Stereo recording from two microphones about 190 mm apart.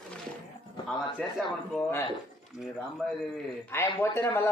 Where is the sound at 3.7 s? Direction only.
10° left (ahead or behind).